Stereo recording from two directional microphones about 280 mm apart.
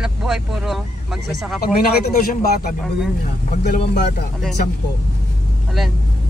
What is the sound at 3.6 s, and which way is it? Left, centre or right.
Speech, left.